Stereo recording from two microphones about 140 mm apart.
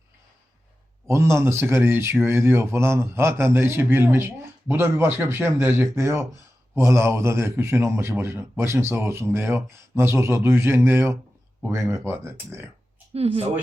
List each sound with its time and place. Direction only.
1.0 s a man's voice: 20° right (ahead or behind)
13.1 s a woman's voice: 45° right (ahead or behind)